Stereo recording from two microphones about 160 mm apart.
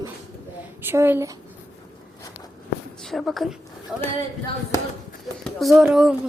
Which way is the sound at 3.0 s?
Centre (ahead or behind).